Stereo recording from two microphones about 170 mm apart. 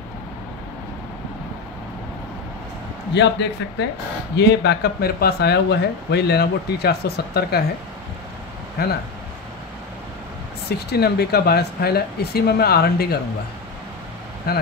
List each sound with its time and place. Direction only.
3.1 s a man's voice: 90° left
4.4 s speech: 75° left (ahead or behind)
8.8 s speech: 70° left (ahead or behind)
10.7 s speech: 70° left (ahead or behind)
14.5 s speech: 65° left (ahead or behind)